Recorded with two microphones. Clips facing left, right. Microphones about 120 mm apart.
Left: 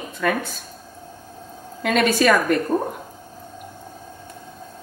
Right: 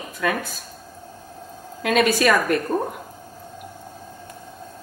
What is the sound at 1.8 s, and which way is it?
Speech, 10° right (ahead or behind).